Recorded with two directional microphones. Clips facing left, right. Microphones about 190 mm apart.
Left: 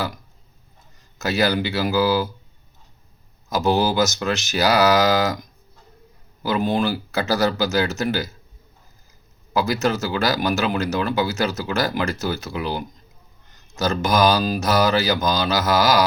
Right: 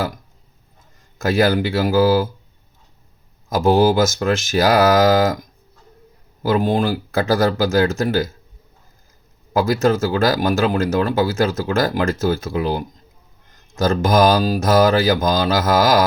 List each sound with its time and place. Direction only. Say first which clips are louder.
1.2 s speech: right 4 dB; 50° right (ahead or behind)
3.5 s speech: right 5 dB; 50° right (ahead or behind)
6.4 s speech: right 3 dB; 50° right (ahead or behind)
9.5 s speech: right 5 dB; 50° right (ahead or behind)